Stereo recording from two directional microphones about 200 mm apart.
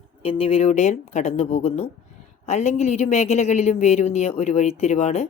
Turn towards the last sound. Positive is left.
turn(degrees=35)  # may be behind; listen again after turning